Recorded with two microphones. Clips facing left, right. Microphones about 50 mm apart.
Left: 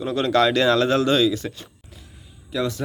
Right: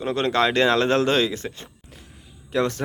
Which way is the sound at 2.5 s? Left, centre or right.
Right.